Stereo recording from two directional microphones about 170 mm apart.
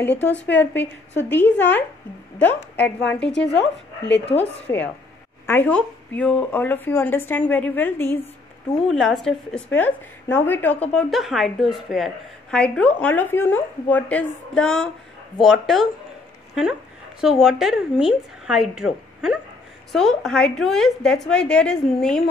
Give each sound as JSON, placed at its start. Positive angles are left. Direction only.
{"t": 0.0, "sound": "speech", "side_deg": 10}
{"t": 3.3, "sound": "speech", "side_deg": 90}
{"t": 4.4, "sound": "speech", "side_deg": 10}
{"t": 8.8, "sound": "a woman's voice", "side_deg": 0}
{"t": 17.2, "sound": "a woman's voice", "side_deg": 0}